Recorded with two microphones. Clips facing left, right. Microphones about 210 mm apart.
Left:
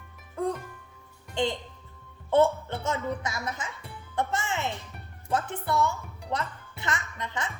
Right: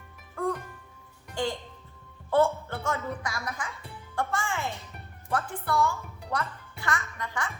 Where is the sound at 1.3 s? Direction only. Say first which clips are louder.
Left 2 dB; 20° left (ahead or behind).